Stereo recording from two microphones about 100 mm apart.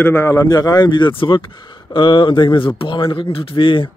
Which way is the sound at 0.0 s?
25° left (ahead or behind).